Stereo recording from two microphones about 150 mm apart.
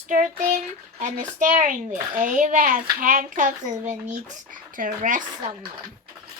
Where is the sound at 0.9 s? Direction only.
55° right (ahead or behind).